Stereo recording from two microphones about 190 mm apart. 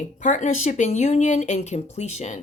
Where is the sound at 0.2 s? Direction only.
40° left (ahead or behind).